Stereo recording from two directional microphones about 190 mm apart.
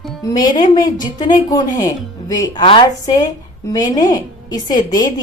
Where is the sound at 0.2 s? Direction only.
20° left (ahead or behind).